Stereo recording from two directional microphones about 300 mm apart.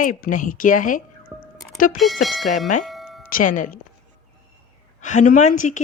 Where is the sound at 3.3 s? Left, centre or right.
Left.